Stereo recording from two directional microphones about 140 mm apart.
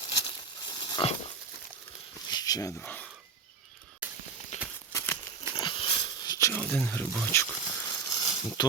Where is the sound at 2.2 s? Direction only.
30° left (ahead or behind).